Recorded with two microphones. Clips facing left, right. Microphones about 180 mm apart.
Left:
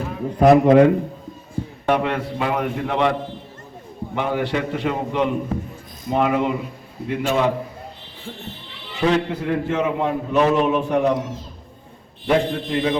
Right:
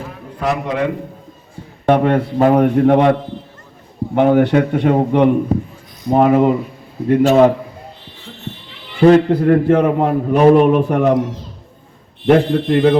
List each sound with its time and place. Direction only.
0.3 s a man's voice: 45° left (ahead or behind)
1.9 s a man's voice: 45° right (ahead or behind)
6.1 s a man's voice: 45° right (ahead or behind)
9.0 s a man's voice: 50° right (ahead or behind)
12.2 s a man's voice: 65° right (ahead or behind)